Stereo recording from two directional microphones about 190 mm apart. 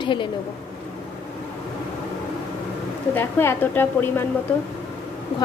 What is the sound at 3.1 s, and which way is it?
A woman's voice, 10° left (ahead or behind).